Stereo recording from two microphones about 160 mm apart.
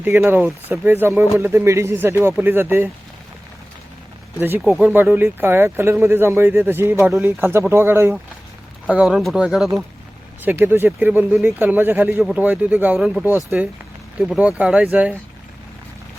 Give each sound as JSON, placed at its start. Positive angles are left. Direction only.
{"t": 0.2, "sound": "speech", "side_deg": -10}
{"t": 4.4, "sound": "speech", "side_deg": -15}
{"t": 4.6, "sound": "speech", "side_deg": 0}
{"t": 8.9, "sound": "speech", "side_deg": -5}